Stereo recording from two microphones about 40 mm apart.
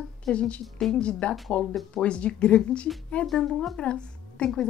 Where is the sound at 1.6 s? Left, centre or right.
Centre.